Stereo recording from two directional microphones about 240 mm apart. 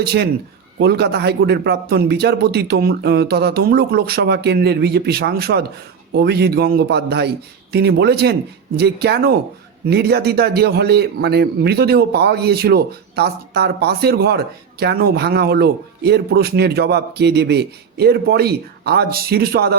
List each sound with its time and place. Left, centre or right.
0.0 s a man's voice: right